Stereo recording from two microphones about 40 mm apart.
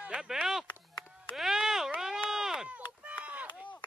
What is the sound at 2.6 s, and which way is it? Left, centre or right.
Chop, right.